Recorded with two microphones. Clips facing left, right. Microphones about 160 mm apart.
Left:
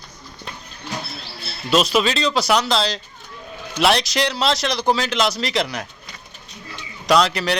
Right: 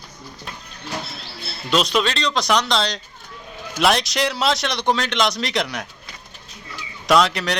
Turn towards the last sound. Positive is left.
turn(degrees=0)  # may be behind; listen again after turning